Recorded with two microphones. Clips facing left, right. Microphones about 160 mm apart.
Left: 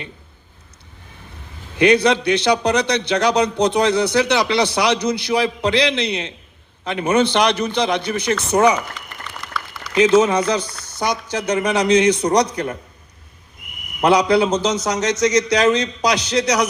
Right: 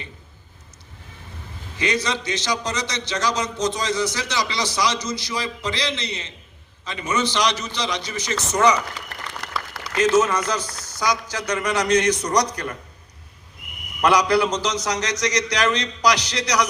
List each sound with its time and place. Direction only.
1.7 s a man's voice: 60° left (ahead or behind)
9.9 s a man's voice: 60° left (ahead or behind)
14.1 s a man's voice: 55° left (ahead or behind)